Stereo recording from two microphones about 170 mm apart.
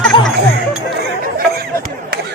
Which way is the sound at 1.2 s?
60° right (ahead or behind).